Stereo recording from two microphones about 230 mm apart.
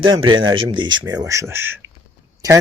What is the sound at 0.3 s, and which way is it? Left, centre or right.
Speech, centre.